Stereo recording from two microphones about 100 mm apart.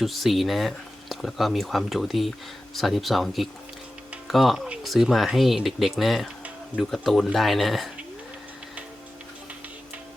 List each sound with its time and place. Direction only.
0.0 s speech: centre (ahead or behind)